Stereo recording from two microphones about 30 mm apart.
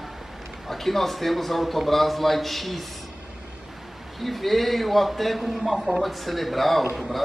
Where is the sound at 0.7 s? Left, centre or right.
Centre.